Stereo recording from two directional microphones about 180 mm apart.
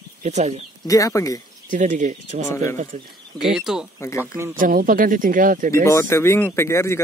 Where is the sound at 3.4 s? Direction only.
Centre (ahead or behind).